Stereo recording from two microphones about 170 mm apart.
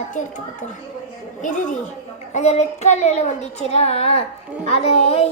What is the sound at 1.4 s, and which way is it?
A child's voice, 50° left (ahead or behind).